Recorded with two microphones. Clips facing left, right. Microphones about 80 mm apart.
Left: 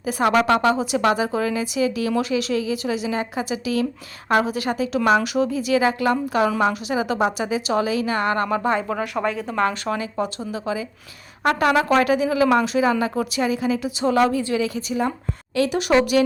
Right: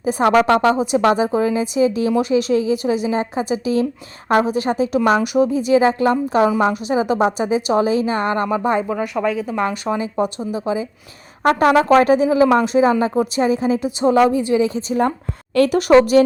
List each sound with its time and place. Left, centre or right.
0.0 s a woman's voice: right
9.1 s speech: centre
9.6 s a woman's voice: centre
15.5 s speech: right